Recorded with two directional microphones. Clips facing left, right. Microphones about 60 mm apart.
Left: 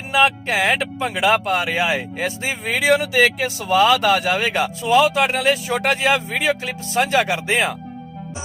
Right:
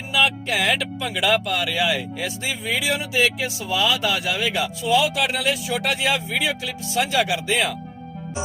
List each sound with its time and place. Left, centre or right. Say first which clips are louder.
0.1 s speech: left 4 dB; left